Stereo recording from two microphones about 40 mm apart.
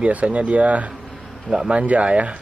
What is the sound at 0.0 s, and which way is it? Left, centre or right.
Speech, right.